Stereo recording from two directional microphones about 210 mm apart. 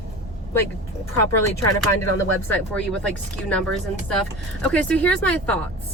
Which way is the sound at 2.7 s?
5° left (ahead or behind).